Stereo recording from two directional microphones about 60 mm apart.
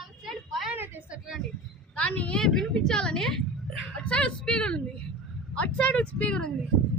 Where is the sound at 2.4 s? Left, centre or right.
Centre.